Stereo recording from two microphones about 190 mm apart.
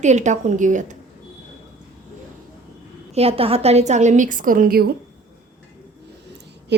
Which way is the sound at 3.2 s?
30° right (ahead or behind).